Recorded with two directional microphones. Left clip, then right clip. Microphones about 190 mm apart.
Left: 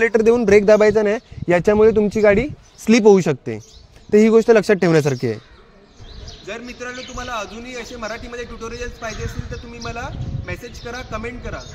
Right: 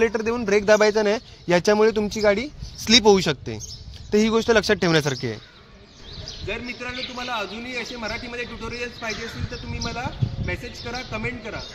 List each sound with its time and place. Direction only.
0.0 s speech: 60° left (ahead or behind)
0.7 s speech: 25° left (ahead or behind)
2.1 s speech: 30° left (ahead or behind)
6.4 s a man's voice: 10° left (ahead or behind)